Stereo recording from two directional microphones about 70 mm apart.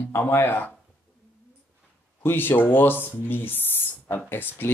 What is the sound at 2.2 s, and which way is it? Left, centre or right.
Speech, left.